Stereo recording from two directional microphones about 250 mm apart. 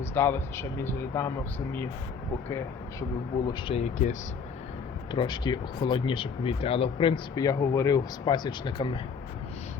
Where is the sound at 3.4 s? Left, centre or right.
Centre.